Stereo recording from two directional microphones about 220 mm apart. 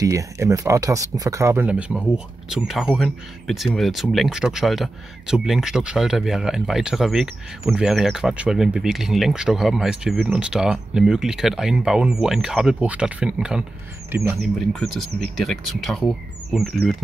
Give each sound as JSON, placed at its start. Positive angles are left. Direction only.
{"t": 0.0, "sound": "speech", "side_deg": -15}